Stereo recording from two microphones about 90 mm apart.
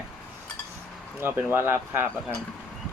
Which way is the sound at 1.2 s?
25° right (ahead or behind).